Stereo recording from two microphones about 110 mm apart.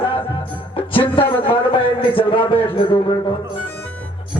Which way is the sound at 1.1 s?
50° left (ahead or behind).